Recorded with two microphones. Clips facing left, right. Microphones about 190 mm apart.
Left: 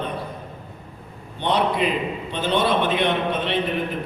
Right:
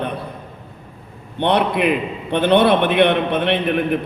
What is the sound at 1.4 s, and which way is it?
A man's voice, 60° right (ahead or behind).